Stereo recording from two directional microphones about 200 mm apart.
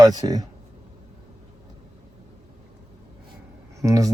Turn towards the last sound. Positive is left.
turn(degrees=-15)  # may be behind; listen again after turning